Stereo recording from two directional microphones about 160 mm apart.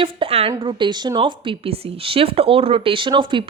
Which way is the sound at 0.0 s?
35° right (ahead or behind).